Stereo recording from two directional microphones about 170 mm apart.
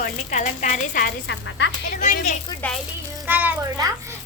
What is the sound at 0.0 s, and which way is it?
A woman's voice, 50° left (ahead or behind).